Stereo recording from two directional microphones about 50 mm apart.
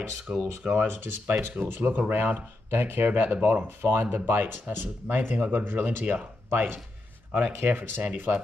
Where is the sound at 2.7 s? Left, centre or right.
Right.